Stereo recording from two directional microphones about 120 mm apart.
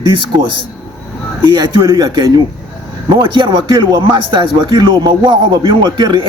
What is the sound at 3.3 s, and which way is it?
Speech, 40° right (ahead or behind).